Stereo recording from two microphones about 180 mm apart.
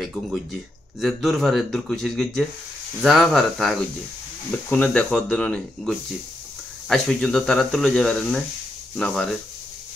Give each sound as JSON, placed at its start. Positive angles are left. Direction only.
{"t": 0.0, "sound": "speech", "side_deg": 0}